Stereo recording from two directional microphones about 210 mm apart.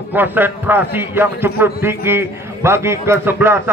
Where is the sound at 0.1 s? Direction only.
10° right (ahead or behind).